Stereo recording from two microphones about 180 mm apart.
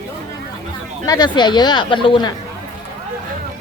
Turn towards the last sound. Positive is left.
turn(degrees=25)  # may be behind; listen again after turning